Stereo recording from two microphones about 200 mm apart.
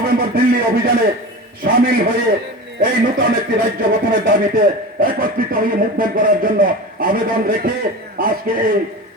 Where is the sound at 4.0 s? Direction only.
45° right (ahead or behind).